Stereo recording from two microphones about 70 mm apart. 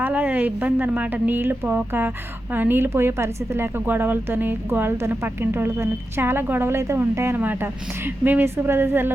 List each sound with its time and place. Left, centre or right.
0.0 s speech: right